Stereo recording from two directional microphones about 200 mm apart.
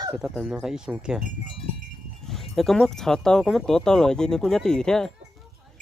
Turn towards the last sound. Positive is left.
turn(degrees=0)  # may be behind; listen again after turning